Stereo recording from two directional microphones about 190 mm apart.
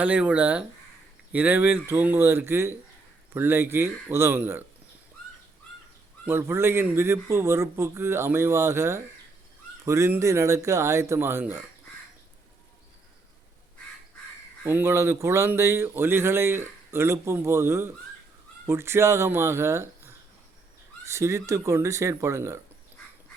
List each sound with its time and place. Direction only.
0.0 s speech: 5° right (ahead or behind)
6.2 s speech: 10° right (ahead or behind)
14.6 s speech: 10° right (ahead or behind)